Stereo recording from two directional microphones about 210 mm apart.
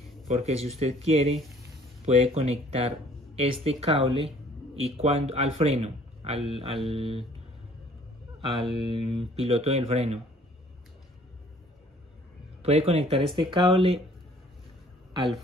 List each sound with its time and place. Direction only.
0.4 s speech: 30° right (ahead or behind)
8.4 s speech: 25° right (ahead or behind)
12.6 s speech: 30° right (ahead or behind)